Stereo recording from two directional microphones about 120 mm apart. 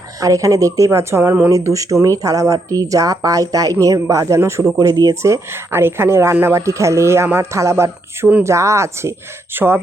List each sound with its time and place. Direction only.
0.2 s speech: 30° right (ahead or behind)